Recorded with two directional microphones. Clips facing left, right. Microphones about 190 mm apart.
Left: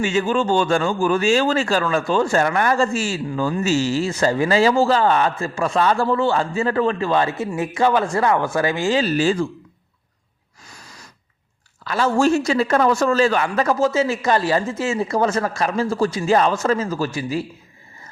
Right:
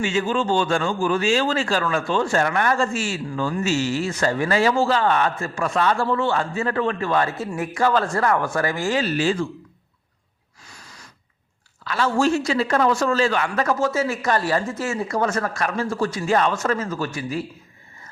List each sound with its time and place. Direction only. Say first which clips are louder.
0.0 s speech: left 3 dB; 45° left (ahead or behind)
11.9 s a man's voice: left 3 dB; 40° left (ahead or behind)
13.4 s speech: left 3 dB; 30° left (ahead or behind)